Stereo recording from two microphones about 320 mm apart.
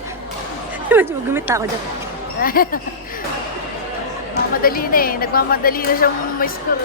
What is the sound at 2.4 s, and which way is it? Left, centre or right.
Speech, left.